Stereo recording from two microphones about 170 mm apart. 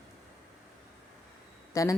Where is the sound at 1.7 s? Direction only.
20° left (ahead or behind).